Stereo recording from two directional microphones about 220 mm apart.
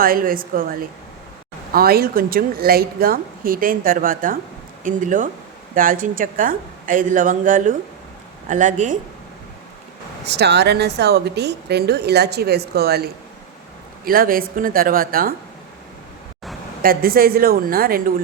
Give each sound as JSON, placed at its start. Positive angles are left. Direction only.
{"t": 0.0, "sound": "a woman's voice", "side_deg": -40}
{"t": 10.2, "sound": "a woman's voice", "side_deg": -50}
{"t": 16.8, "sound": "a woman's voice", "side_deg": -40}